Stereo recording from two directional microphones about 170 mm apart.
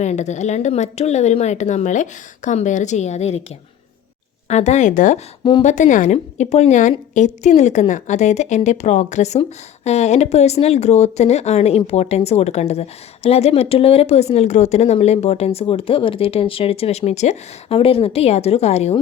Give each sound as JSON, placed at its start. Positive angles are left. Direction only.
{"t": 0.0, "sound": "speech", "side_deg": 40}
{"t": 4.4, "sound": "a woman's voice", "side_deg": 40}